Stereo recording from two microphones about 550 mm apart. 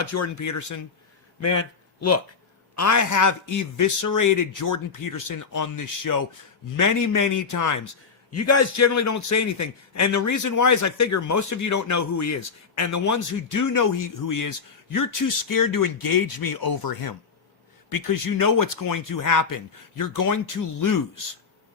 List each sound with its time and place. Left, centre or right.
0.0 s a man's voice: left
2.0 s a man's voice: left